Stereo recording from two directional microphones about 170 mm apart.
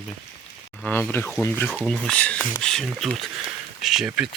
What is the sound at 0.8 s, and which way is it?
Speech, 10° left (ahead or behind).